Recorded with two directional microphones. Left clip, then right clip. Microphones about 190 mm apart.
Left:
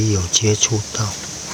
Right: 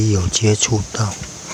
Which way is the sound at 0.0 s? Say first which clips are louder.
Even; 20° right (ahead or behind).